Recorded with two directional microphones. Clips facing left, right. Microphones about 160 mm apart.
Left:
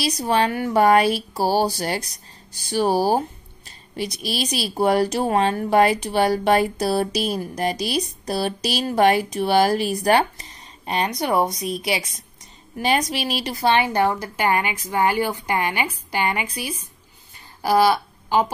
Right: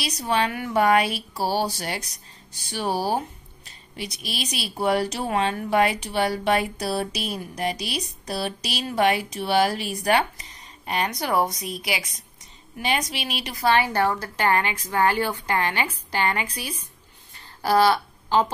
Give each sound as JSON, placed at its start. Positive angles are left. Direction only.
{"t": 0.0, "sound": "speech", "side_deg": 40}
{"t": 10.9, "sound": "speech", "side_deg": 20}
{"t": 12.7, "sound": "a woman's voice", "side_deg": 40}